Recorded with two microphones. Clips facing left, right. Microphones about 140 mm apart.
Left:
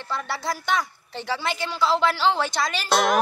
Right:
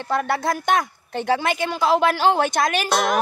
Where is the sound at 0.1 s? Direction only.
50° right (ahead or behind).